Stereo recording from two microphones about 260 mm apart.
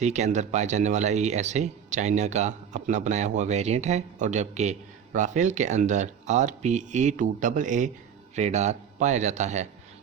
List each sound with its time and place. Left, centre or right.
0.0 s speech: right